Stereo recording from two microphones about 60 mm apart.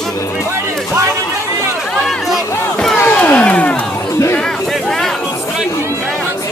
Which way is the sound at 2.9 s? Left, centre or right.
Left.